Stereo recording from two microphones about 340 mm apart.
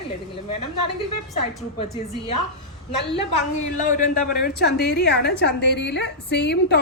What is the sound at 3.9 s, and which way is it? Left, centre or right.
A woman's voice, left.